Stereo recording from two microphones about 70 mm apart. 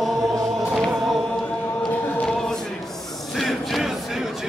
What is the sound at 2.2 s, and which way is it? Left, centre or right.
Choir, centre.